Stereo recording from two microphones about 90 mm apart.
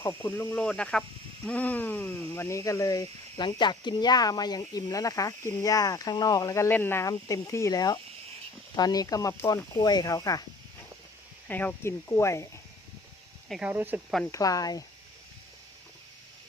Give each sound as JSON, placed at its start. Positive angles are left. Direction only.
{"t": 0.0, "sound": "speech", "side_deg": 30}
{"t": 0.5, "sound": "speech", "side_deg": 15}
{"t": 3.3, "sound": "speech", "side_deg": 60}
{"t": 6.7, "sound": "speech", "side_deg": 25}
{"t": 7.0, "sound": "speech", "side_deg": 40}
{"t": 11.4, "sound": "speech", "side_deg": 20}
{"t": 11.8, "sound": "speech", "side_deg": 30}
{"t": 13.6, "sound": "speech", "side_deg": -20}
{"t": 14.3, "sound": "speech", "side_deg": 40}